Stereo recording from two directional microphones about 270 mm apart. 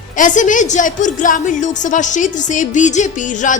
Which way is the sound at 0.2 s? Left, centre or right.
Left.